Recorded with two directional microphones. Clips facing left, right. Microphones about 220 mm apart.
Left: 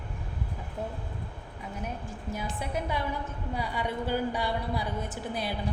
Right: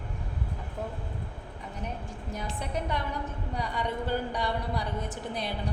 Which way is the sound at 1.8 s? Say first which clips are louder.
Even; 5° left (ahead or behind).